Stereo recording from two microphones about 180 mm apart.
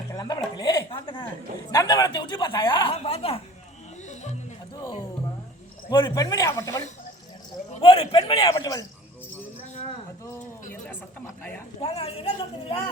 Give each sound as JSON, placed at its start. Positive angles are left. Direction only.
{"t": 0.1, "sound": "a woman's voice", "side_deg": 20}
{"t": 5.9, "sound": "a woman's voice", "side_deg": 25}
{"t": 7.8, "sound": "speech", "side_deg": 30}
{"t": 8.4, "sound": "a woman's voice", "side_deg": 20}
{"t": 11.8, "sound": "speech", "side_deg": 35}